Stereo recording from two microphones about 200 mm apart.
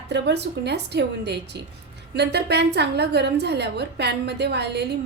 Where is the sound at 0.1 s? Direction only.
55° right (ahead or behind).